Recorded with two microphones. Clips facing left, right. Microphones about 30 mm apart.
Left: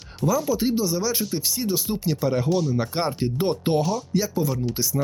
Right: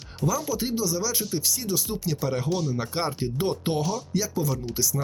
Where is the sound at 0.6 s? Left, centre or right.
Left.